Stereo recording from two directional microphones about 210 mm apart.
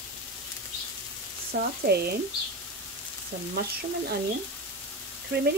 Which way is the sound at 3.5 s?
50° right (ahead or behind).